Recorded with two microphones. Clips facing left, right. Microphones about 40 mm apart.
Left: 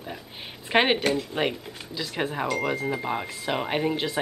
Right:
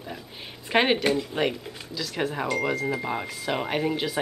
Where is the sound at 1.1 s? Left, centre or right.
Centre.